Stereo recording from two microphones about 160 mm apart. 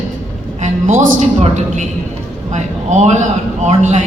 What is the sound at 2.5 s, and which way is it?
A woman's voice, 50° right (ahead or behind).